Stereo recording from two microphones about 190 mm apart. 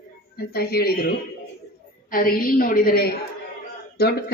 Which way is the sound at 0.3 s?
55° left (ahead or behind).